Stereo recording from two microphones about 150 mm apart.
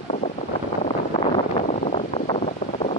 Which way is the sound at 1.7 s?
50° left (ahead or behind).